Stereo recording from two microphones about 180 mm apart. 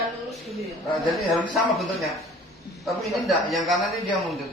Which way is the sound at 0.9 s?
Centre (ahead or behind).